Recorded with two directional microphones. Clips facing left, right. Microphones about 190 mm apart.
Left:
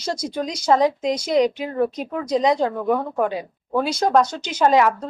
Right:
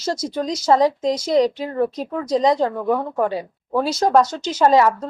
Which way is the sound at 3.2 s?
15° left (ahead or behind).